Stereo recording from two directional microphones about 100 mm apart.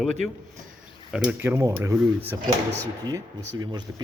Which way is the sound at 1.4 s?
25° right (ahead or behind).